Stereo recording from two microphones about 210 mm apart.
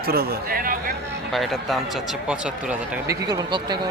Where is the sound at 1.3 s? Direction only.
Centre (ahead or behind).